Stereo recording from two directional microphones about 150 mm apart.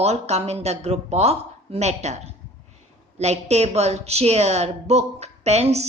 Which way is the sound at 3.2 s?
45° right (ahead or behind).